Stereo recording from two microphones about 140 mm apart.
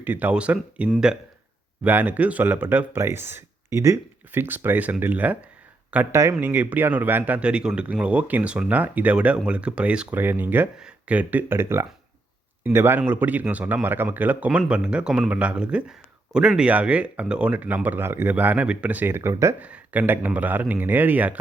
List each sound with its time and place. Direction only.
0.0 s a man's voice: 15° right (ahead or behind)
1.8 s a man's voice: 10° right (ahead or behind)
19.6 s a man's voice: 10° right (ahead or behind)